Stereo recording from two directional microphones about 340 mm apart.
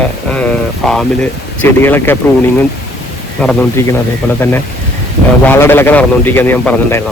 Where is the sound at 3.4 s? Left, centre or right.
Centre.